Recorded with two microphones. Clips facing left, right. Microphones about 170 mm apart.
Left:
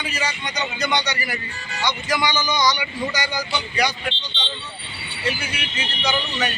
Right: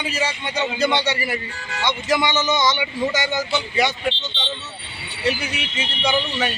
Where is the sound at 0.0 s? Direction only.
25° right (ahead or behind).